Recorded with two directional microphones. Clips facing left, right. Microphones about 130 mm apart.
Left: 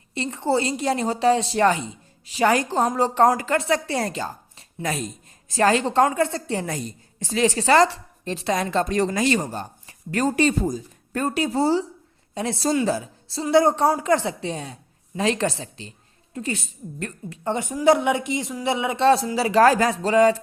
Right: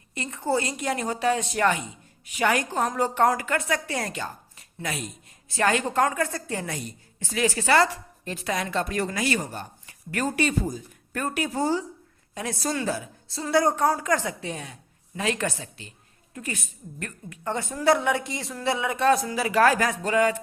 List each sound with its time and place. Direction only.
0.1 s a woman's voice: 30° left (ahead or behind)
6.7 s a woman's voice: 40° left (ahead or behind)
13.4 s a woman's voice: 25° left (ahead or behind)